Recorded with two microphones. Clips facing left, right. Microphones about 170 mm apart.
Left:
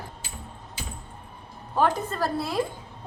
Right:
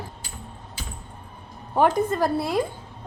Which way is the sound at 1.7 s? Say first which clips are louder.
Right 4 dB; 15° right (ahead or behind).